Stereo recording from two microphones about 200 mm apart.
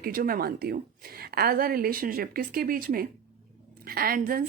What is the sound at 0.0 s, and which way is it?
A woman's voice, 45° right (ahead or behind).